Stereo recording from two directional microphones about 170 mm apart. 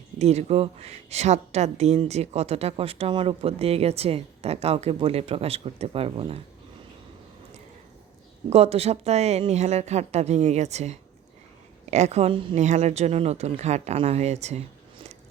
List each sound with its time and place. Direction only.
0.2 s a woman's voice: 40° right (ahead or behind)
8.4 s a woman's voice: 35° right (ahead or behind)
12.5 s a woman's voice: 45° right (ahead or behind)